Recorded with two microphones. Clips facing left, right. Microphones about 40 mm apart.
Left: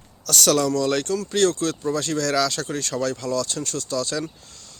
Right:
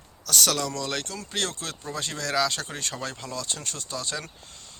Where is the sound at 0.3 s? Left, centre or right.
Centre.